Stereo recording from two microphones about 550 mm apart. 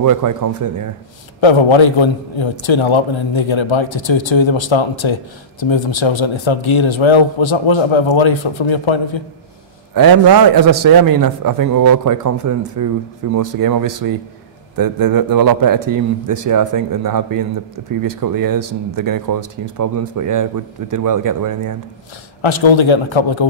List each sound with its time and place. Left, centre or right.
0.0 s a man's voice: right
1.4 s speech: left
9.9 s a man's voice: right
22.4 s speech: left